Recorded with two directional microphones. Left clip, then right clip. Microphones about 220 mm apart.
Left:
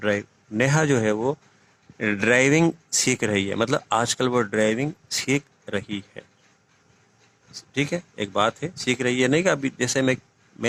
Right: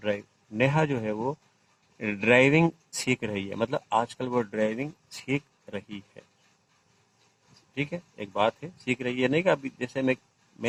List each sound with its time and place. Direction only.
0.0 s speech: 45° left (ahead or behind)
7.7 s speech: 40° left (ahead or behind)